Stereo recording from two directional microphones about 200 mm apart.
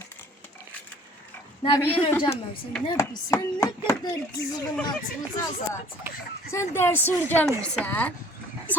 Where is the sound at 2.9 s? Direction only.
15° left (ahead or behind).